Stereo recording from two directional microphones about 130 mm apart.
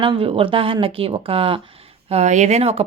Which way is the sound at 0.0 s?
45° right (ahead or behind).